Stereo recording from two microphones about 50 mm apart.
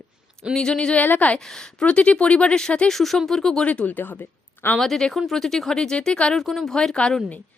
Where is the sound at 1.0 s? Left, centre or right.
Left.